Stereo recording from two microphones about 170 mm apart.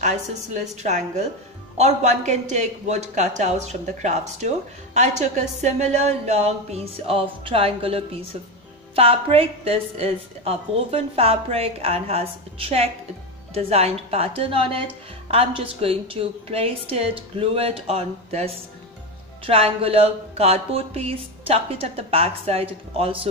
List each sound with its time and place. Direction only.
0.0 s a woman's voice: 40° right (ahead or behind)